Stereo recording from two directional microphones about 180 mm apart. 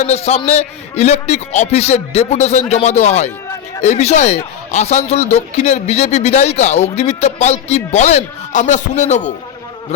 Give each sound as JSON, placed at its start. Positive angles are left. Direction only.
{"t": 0.0, "sound": "a man's voice", "side_deg": 35}